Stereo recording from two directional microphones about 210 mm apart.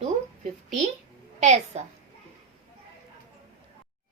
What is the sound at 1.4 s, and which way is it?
Speech, 35° right (ahead or behind).